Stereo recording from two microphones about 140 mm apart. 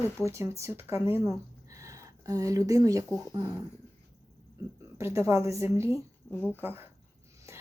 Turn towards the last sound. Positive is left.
turn(degrees=-15)  # may be behind; listen again after turning